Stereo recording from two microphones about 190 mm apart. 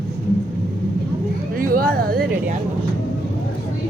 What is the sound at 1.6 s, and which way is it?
Speech, 50° right (ahead or behind).